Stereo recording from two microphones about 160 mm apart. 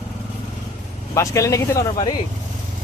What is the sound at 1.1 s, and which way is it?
Speech, 20° left (ahead or behind).